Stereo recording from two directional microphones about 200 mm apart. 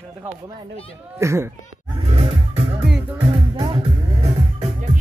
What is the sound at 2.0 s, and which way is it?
Music, 30° right (ahead or behind).